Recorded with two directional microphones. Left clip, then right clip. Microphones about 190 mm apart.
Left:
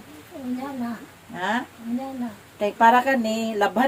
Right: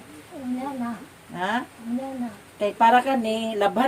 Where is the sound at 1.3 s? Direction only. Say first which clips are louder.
Left 1 dB; 15° left (ahead or behind).